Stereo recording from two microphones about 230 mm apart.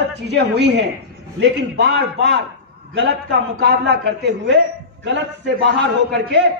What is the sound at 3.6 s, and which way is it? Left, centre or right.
A man's voice, right.